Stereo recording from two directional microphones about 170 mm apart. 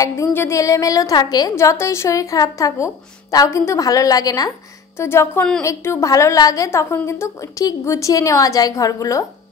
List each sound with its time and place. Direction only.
0.0 s a woman's voice: 15° left (ahead or behind)